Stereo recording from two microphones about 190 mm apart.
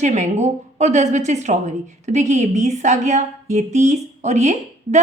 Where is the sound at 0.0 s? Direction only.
40° right (ahead or behind).